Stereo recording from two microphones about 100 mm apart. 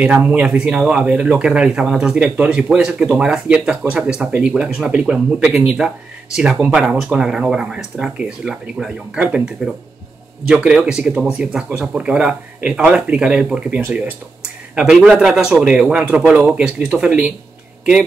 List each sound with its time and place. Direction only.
0.0 s a man's voice: 10° right (ahead or behind)
15.9 s speech: 15° right (ahead or behind)